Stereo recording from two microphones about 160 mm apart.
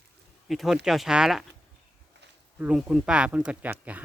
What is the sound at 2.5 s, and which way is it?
Speech, 5° right (ahead or behind).